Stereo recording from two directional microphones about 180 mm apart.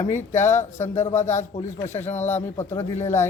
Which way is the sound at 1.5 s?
35° left (ahead or behind).